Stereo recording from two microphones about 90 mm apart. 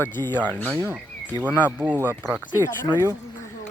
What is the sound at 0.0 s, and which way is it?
Speech, 25° left (ahead or behind).